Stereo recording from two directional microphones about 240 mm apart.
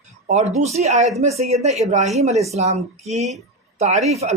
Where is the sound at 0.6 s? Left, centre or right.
Right.